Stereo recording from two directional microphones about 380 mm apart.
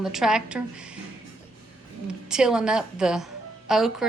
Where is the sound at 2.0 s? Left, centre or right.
Centre.